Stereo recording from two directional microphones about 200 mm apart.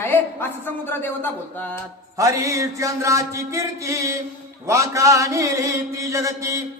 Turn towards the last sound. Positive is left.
turn(degrees=-15)  # may be behind; listen again after turning